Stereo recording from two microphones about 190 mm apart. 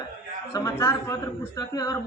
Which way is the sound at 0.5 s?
15° left (ahead or behind).